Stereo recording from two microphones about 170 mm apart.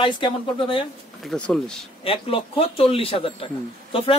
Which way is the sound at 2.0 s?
35° left (ahead or behind).